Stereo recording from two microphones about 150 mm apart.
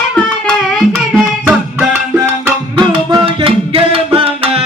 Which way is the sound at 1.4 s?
10° right (ahead or behind).